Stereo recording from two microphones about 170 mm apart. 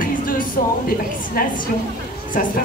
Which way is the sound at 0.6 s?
55° left (ahead or behind).